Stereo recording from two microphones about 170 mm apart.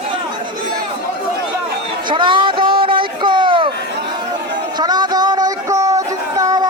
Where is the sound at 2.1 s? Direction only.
30° right (ahead or behind).